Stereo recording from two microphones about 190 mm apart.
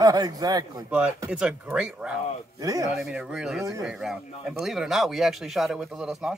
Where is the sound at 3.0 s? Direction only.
5° right (ahead or behind).